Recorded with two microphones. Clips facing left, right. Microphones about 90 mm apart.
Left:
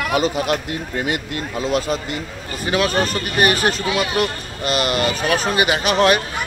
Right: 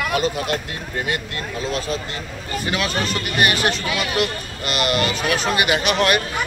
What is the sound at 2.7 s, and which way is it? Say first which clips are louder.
Speech: left 5 dB; 40° left (ahead or behind).